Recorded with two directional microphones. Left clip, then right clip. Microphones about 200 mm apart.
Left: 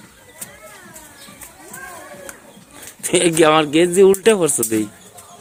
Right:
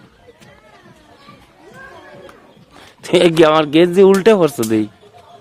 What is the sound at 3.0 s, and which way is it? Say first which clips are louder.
Speech: right 4 dB; 25° right (ahead or behind).